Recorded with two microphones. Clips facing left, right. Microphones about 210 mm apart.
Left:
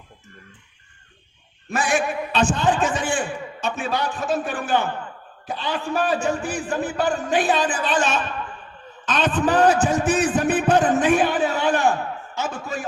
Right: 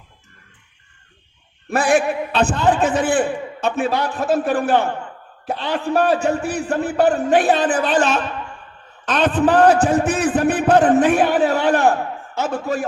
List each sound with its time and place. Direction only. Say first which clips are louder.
1.7 s a man's voice: right 6 dB; 60° right (ahead or behind)